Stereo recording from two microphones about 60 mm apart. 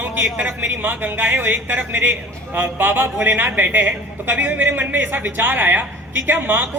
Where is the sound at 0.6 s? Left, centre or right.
Right.